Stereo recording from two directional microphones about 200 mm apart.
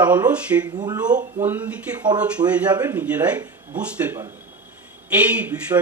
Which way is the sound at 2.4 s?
25° right (ahead or behind).